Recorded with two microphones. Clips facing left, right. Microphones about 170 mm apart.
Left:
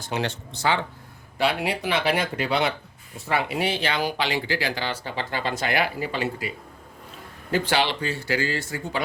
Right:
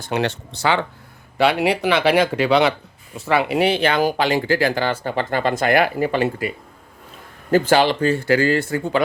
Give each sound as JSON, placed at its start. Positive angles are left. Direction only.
{"t": 0.0, "sound": "speech", "side_deg": -65}
{"t": 7.5, "sound": "speech", "side_deg": -45}